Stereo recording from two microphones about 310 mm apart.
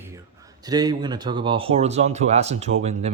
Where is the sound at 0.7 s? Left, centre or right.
Centre.